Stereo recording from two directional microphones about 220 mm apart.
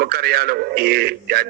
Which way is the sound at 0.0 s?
45° right (ahead or behind).